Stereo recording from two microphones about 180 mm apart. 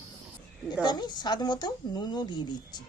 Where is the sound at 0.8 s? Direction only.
25° left (ahead or behind).